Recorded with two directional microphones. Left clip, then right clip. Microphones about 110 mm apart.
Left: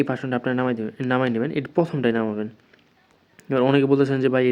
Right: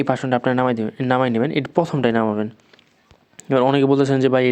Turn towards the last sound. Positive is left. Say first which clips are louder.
# right 3 dB
turn(degrees=-35)  # may be behind; listen again after turning